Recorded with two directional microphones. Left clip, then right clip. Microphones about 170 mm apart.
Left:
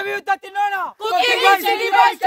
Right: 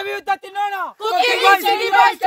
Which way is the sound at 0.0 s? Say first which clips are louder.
Left 1 dB; 10° left (ahead or behind).